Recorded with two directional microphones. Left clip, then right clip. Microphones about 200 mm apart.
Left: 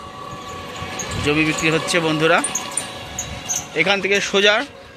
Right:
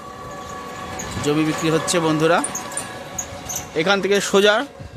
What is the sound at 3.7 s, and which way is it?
Speech, 30° right (ahead or behind).